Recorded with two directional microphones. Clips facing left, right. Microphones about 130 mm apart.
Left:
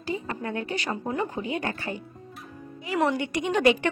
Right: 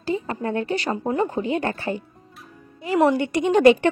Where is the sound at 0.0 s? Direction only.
30° right (ahead or behind).